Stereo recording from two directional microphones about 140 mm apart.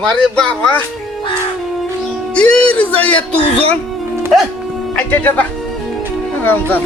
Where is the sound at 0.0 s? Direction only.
5° left (ahead or behind).